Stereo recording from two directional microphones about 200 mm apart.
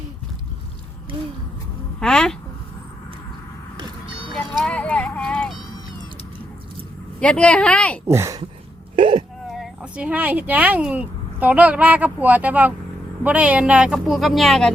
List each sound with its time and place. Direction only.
2.0 s speech: 5° left (ahead or behind)
3.8 s vehicle: 25° right (ahead or behind)
4.4 s a sound: 5° left (ahead or behind)
7.2 s speech: 5° left (ahead or behind)
8.0 s speech: 15° right (ahead or behind)
9.5 s speech: 5° right (ahead or behind)